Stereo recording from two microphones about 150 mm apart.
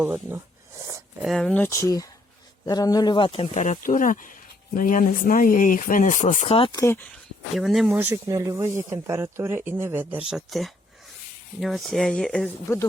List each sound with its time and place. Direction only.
0.0 s speech: 15° right (ahead or behind)
1.2 s speech: centre (ahead or behind); by 6.6 s 50° left (ahead or behind)
6.7 s speech: 15° left (ahead or behind)
7.5 s speech: centre (ahead or behind)
7.9 s speech: 20° right (ahead or behind); by 12.5 s 5° left (ahead or behind)